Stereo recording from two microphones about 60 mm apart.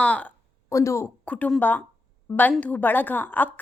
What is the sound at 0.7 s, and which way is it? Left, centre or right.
Speech, left.